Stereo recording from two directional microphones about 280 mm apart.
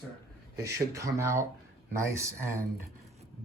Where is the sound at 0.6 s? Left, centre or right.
Centre.